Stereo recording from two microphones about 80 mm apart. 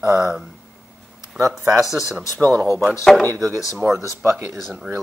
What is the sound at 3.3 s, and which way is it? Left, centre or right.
Speech, right.